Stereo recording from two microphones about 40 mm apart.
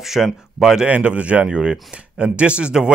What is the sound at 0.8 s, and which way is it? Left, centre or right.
A man's voice, right.